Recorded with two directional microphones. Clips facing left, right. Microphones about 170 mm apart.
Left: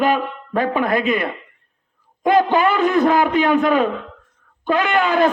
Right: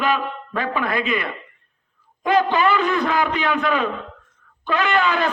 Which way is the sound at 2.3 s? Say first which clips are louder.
Left 3 dB; 50° left (ahead or behind).